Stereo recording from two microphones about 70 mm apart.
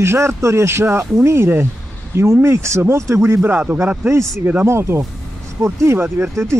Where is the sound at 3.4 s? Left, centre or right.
Right.